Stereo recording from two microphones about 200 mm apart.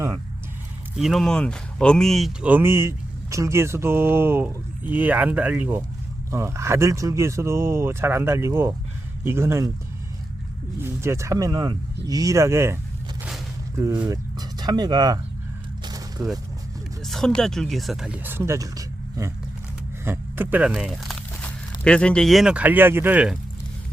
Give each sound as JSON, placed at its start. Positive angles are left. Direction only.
{"t": 0.9, "sound": "speech", "side_deg": 0}
{"t": 10.8, "sound": "speech", "side_deg": -10}
{"t": 15.8, "sound": "a sound", "side_deg": -20}
{"t": 17.0, "sound": "speech", "side_deg": 0}